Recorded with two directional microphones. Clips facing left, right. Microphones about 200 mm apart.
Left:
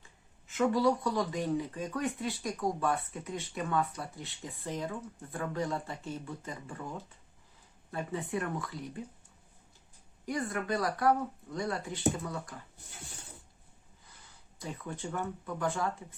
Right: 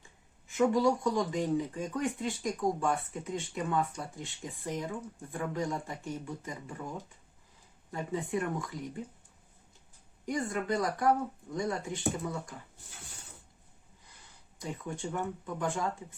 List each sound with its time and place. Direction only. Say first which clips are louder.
0.5 s speech: right 1 dB; 15° right (ahead or behind)
10.2 s speech: right 1 dB; 20° right (ahead or behind)
14.6 s speech: right 2 dB; 15° right (ahead or behind)